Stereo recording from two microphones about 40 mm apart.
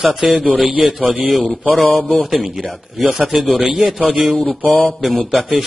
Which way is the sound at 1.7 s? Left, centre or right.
Left.